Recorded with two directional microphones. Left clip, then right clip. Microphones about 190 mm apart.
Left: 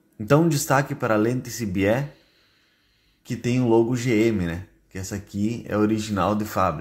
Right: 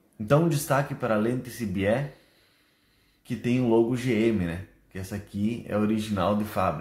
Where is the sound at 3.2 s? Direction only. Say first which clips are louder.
Left 3 dB; 35° left (ahead or behind).